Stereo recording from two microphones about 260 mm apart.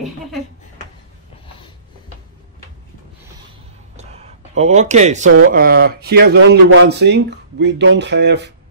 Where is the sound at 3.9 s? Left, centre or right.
Right.